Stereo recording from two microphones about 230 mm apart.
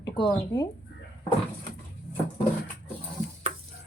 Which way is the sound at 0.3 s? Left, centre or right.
Centre.